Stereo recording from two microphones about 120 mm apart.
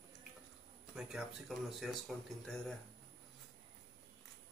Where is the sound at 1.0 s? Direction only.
5° right (ahead or behind).